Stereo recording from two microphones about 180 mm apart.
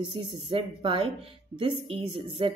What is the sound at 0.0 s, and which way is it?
A woman's voice, 25° right (ahead or behind).